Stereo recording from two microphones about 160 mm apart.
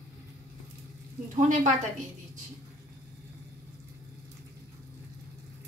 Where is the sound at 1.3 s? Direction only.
50° right (ahead or behind).